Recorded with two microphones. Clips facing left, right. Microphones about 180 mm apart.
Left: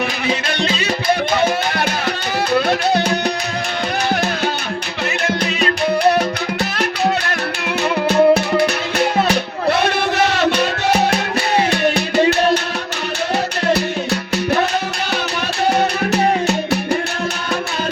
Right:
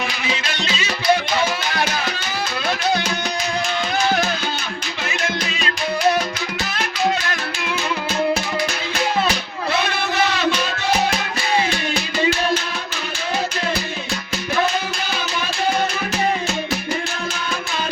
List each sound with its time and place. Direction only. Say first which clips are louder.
1.3 s music: left 5 dB; 60° left (ahead or behind)
7.6 s music: left 7 dB; 60° left (ahead or behind)
13.7 s music: left 7 dB; 65° left (ahead or behind)
16.1 s music: left 6 dB; 65° left (ahead or behind)